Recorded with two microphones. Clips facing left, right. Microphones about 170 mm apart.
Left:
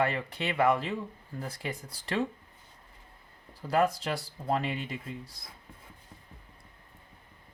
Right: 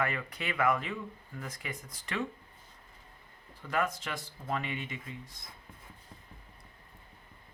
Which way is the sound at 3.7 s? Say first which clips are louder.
Left 6 dB; 35° left (ahead or behind).